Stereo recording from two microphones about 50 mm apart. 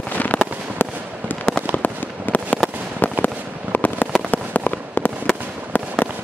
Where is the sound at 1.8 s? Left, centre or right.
Left.